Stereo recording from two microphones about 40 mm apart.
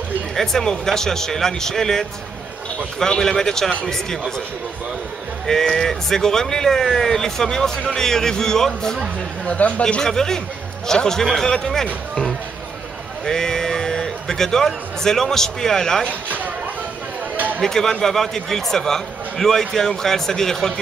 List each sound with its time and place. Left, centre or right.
0.4 s a man's voice: centre
5.5 s a man's voice: centre
9.5 s speech: left
10.0 s a man's voice: centre
17.6 s a man's voice: centre